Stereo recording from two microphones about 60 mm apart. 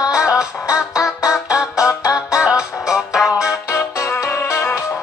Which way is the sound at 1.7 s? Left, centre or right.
Left.